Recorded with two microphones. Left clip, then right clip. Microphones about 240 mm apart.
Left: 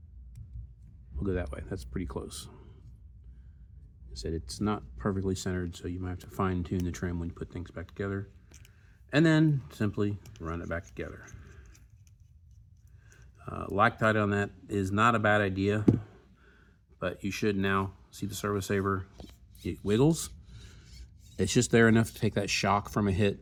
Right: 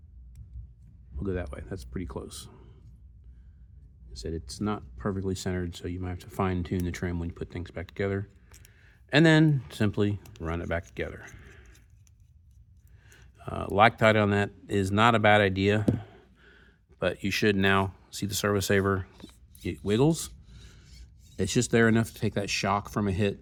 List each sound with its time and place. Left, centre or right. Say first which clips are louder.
1.2 s speech: even; right
4.1 s speech: even; right
13.1 s speech: right 4 dB; right
19.6 s filing: right 1 dB; right
21.3 s speech: even; right